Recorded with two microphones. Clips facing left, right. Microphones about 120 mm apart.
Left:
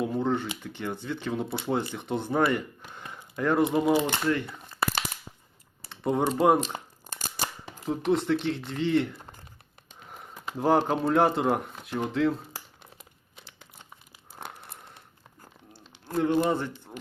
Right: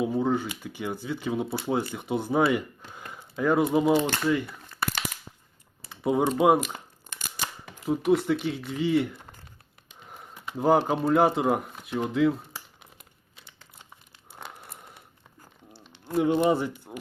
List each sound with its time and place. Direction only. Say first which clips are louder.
0.0 s speech: right 2 dB; 5° right (ahead or behind)
4.4 s crumpling: left 2 dB; 25° left (ahead or behind)
5.9 s speech: right 2 dB; 5° right (ahead or behind)
6.7 s a sound: left 4 dB; 40° left (ahead or behind)
7.9 s speech: right 2 dB; 5° right (ahead or behind)
10.6 s speech: right 1 dB; centre (ahead or behind)
16.3 s speech: right 2 dB; 15° right (ahead or behind)